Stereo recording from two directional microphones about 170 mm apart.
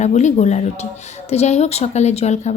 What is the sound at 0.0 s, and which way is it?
A woman's voice, 45° left (ahead or behind).